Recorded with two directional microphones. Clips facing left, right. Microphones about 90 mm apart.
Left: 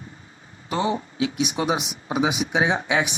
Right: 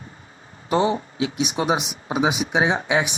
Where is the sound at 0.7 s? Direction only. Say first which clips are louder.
Right 4 dB; 30° right (ahead or behind).